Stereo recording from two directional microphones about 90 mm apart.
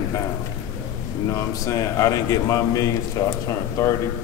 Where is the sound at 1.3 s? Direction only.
35° left (ahead or behind).